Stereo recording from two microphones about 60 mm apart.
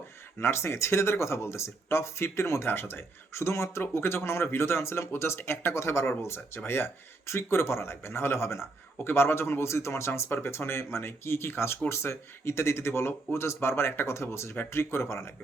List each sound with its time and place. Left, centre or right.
0.3 s speech: left